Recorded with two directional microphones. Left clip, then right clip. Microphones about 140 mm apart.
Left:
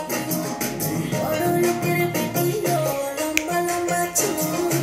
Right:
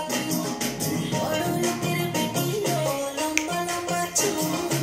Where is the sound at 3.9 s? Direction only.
25° left (ahead or behind).